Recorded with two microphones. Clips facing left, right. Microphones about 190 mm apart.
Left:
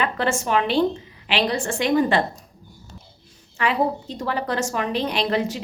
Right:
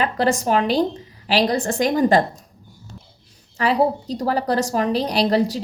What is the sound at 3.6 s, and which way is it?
A woman's voice, 35° right (ahead or behind).